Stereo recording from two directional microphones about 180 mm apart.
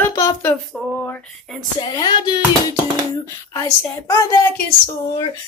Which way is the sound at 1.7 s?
25° left (ahead or behind).